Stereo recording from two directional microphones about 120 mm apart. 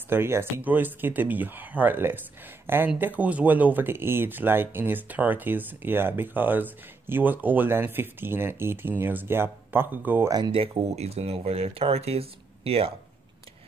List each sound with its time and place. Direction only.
0.1 s speech: 20° right (ahead or behind)
10.5 s speech: 50° right (ahead or behind)